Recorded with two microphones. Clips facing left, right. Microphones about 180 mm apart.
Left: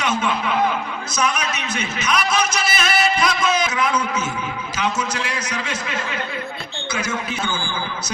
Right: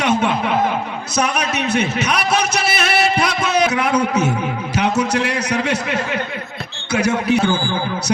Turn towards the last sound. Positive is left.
turn(degrees=-35)  # may be behind; listen again after turning